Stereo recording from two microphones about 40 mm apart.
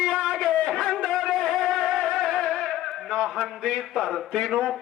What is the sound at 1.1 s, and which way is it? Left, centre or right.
Music, centre.